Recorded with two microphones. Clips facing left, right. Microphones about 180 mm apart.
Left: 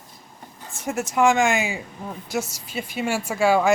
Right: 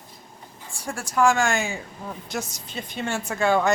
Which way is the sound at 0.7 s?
20° left (ahead or behind).